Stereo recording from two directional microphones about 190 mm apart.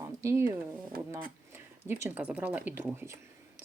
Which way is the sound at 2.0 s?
10° right (ahead or behind).